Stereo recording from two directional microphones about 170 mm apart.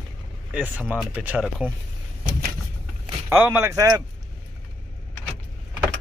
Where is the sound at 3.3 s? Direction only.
10° right (ahead or behind).